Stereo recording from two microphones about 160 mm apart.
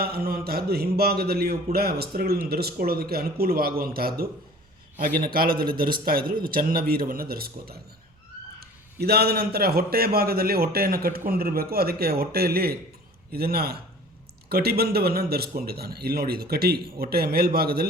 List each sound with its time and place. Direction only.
0.0 s a man's voice: 70° right (ahead or behind)
8.6 s a man's voice: 80° right